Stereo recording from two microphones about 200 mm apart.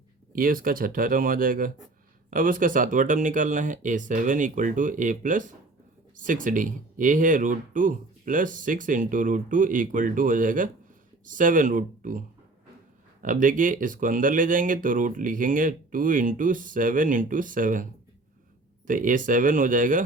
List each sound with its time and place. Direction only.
0.3 s speech: 45° right (ahead or behind)
13.2 s speech: 40° right (ahead or behind)
18.9 s speech: 40° right (ahead or behind)